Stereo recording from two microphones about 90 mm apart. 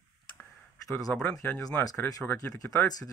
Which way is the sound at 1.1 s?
15° left (ahead or behind).